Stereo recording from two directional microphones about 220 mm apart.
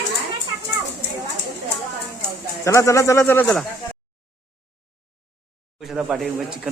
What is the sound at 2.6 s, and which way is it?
Speech, 15° left (ahead or behind).